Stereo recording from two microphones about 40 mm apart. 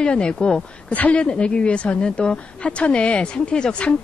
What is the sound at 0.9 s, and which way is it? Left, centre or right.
A woman's voice, left.